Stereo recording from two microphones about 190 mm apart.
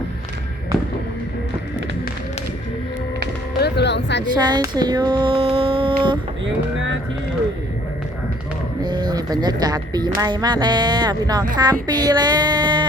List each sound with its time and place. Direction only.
3.6 s music: 65° left (ahead or behind)
4.4 s speech: 25° right (ahead or behind)
6.4 s a sound: 75° right (ahead or behind)
8.8 s music: 20° right (ahead or behind)
10.2 s speech: 20° right (ahead or behind)